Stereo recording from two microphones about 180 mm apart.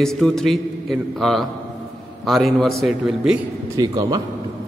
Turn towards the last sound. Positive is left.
turn(degrees=-20)  # may be behind; listen again after turning